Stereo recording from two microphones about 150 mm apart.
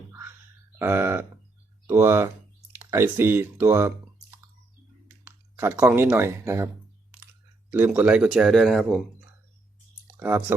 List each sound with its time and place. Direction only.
0.1 s a sound: 15° right (ahead or behind)
0.8 s speech: 15° right (ahead or behind)
5.0 s clicking: 15° right (ahead or behind)
5.9 s speech: 10° right (ahead or behind)
7.7 s speech: 10° right (ahead or behind)
10.2 s speech: 15° right (ahead or behind)